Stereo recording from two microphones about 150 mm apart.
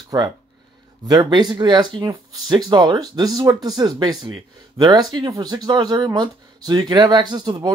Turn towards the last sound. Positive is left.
turn(degrees=-30)  # may be behind; listen again after turning